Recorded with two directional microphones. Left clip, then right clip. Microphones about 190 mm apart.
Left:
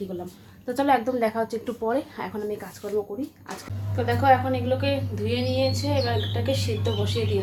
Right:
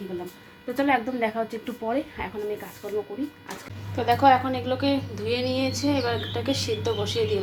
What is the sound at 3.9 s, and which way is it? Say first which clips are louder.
A woman's voice: right 1 dB; 20° right (ahead or behind).